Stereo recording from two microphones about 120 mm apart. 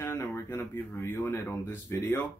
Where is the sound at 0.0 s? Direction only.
20° left (ahead or behind).